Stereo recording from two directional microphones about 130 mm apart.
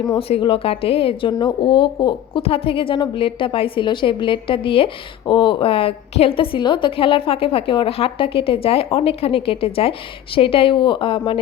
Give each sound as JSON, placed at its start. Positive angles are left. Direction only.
{"t": 0.2, "sound": "speech", "side_deg": 45}